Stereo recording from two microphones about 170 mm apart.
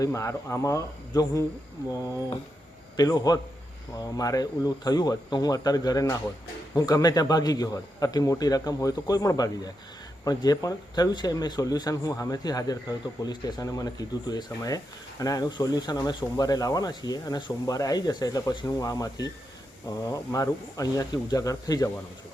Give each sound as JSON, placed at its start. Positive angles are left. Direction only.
{"t": 0.0, "sound": "speech", "side_deg": 15}
{"t": 2.9, "sound": "speech", "side_deg": 25}